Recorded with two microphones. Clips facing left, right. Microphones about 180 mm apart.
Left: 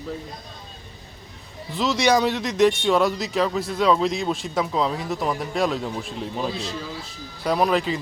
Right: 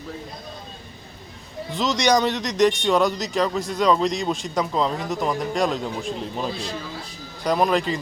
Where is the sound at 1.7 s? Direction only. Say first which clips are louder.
Even; centre (ahead or behind).